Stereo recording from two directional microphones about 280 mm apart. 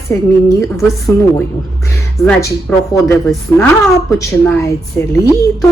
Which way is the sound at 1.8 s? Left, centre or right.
Centre.